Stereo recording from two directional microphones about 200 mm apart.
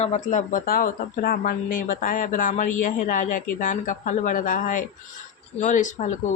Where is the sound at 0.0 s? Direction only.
35° left (ahead or behind).